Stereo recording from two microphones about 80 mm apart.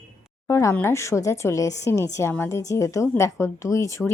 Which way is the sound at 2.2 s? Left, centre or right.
Left.